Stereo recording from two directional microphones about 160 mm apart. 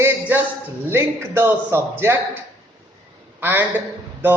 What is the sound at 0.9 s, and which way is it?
Speech, 15° right (ahead or behind).